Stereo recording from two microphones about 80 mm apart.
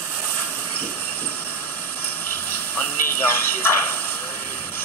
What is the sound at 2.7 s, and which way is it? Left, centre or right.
Speech, left.